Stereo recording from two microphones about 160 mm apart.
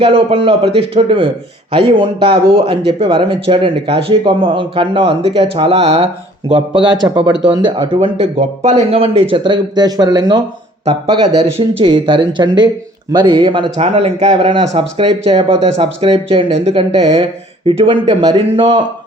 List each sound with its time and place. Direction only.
0.0 s a man's voice: 35° right (ahead or behind)
8.0 s speech: 40° right (ahead or behind)
11.5 s speech: 35° right (ahead or behind)